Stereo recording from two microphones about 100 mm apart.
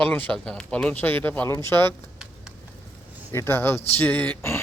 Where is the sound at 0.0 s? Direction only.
15° left (ahead or behind).